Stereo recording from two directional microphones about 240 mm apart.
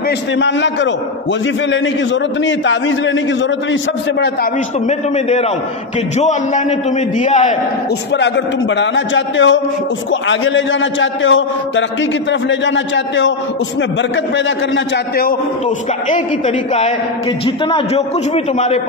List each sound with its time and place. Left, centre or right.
0.4 s a man's voice: left
2.4 s a man's voice: left
4.8 s a man's voice: left
8.1 s a man's voice: left
16.1 s a man's voice: left